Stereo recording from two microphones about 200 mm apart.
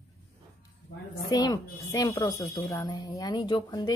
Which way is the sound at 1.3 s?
15° left (ahead or behind).